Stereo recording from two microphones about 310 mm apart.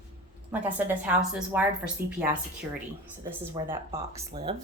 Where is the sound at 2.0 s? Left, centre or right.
Right.